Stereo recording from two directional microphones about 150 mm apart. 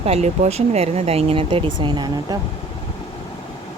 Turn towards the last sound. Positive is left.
turn(degrees=-30)  # may be behind; listen again after turning